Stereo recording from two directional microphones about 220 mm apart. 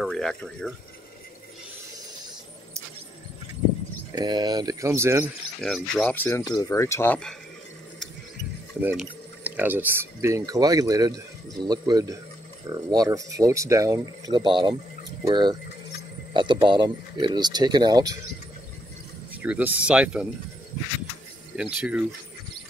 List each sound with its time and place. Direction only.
0.0 s speech: centre (ahead or behind)
4.1 s speech: 20° right (ahead or behind)
5.6 s speech: centre (ahead or behind)
8.8 s speech: 5° right (ahead or behind)
19.4 s speech: 5° right (ahead or behind)
21.5 s speech: 5° right (ahead or behind)